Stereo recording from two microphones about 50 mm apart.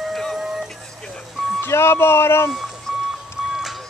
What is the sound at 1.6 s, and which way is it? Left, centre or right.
Speech, left.